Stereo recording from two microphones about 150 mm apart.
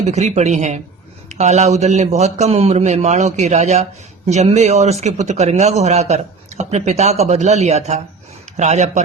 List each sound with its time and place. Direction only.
0.0 s speech: 45° right (ahead or behind)